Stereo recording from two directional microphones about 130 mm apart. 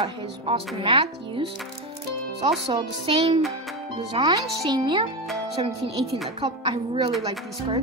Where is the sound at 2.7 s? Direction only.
45° right (ahead or behind).